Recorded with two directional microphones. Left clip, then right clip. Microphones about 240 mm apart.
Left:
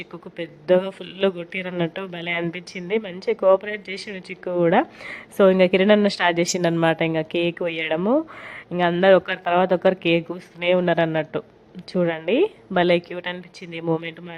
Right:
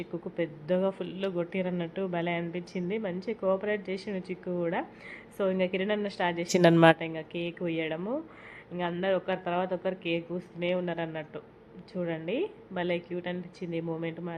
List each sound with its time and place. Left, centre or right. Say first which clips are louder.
0.7 s speech: left 11 dB; left
6.5 s a woman's voice: even; centre
7.0 s speech: left 13 dB; left